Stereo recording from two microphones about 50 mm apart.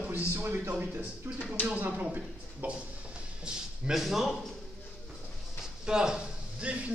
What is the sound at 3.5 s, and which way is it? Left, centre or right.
Speech, centre.